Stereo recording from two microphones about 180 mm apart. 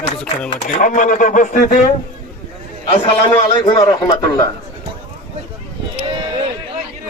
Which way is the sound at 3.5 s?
25° left (ahead or behind).